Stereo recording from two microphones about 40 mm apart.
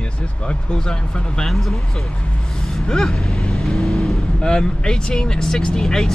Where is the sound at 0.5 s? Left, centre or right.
Left.